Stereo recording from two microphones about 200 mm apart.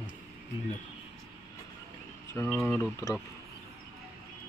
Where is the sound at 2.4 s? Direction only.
Centre (ahead or behind).